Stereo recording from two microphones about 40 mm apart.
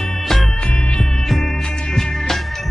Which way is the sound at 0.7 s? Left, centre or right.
Left.